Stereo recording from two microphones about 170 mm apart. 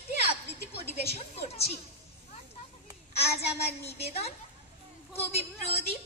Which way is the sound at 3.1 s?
40° left (ahead or behind).